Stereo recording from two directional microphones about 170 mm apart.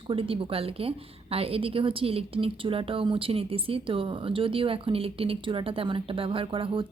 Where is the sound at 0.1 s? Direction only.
30° right (ahead or behind).